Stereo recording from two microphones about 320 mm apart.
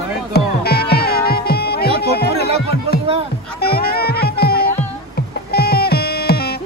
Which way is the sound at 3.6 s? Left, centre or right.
Left.